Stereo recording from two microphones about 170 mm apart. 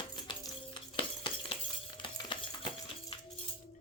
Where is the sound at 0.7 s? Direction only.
30° left (ahead or behind).